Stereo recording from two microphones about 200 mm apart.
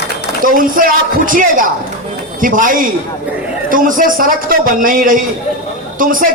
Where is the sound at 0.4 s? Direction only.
45° right (ahead or behind).